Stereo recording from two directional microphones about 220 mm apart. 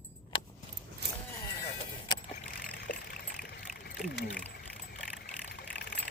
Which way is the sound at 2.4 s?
40° left (ahead or behind).